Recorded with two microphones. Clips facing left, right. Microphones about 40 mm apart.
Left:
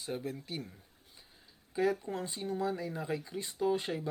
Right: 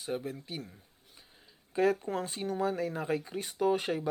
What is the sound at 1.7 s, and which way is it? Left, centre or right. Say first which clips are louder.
Speech: right 3 dB; right.